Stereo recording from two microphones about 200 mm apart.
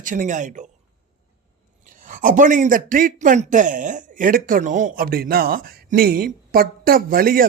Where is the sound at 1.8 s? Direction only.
40° right (ahead or behind).